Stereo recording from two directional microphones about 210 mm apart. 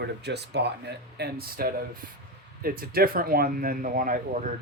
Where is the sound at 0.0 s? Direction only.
50° right (ahead or behind).